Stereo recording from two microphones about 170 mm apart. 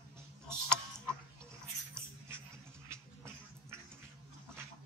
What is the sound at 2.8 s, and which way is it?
Music, 15° right (ahead or behind).